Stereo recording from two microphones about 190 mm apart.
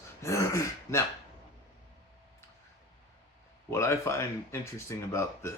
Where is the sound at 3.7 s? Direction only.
15° left (ahead or behind).